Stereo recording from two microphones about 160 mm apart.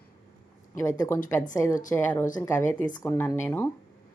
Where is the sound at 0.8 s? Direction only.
20° left (ahead or behind).